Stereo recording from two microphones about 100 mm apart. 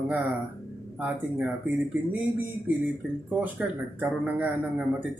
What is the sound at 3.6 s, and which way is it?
Speech, 10° right (ahead or behind).